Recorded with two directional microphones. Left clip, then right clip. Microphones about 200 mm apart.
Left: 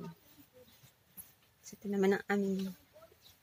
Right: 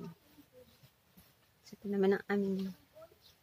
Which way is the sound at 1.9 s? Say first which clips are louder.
Even; 25° left (ahead or behind).